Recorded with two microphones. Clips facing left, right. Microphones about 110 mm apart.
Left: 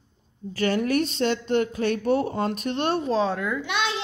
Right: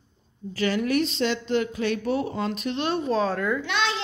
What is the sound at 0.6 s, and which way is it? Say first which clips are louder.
A woman's voice: left 1 dB; 45° left (ahead or behind).